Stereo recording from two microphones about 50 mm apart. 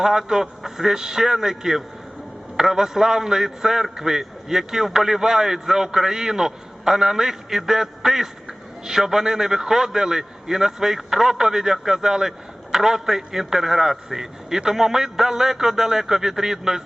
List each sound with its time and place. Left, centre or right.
0.0 s a man's voice: centre